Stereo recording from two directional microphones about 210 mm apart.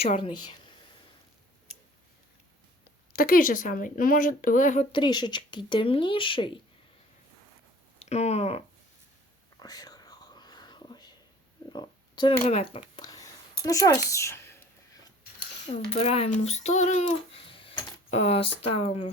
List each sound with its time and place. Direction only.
0.0 s speech: 25° left (ahead or behind)
2.8 s speech: 45° left (ahead or behind); by 6.6 s 25° left (ahead or behind)
7.9 s speech: 30° left (ahead or behind)
9.6 s whispering: 20° left (ahead or behind)
11.7 s a sound: 20° left (ahead or behind)
12.4 s speech: 30° left (ahead or behind)
13.0 s a sound: 20° left (ahead or behind)
13.7 s speech: 15° left (ahead or behind)
15.9 s speech: 30° left (ahead or behind)